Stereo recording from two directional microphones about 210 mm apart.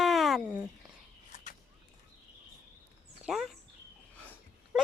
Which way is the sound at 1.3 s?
35° left (ahead or behind).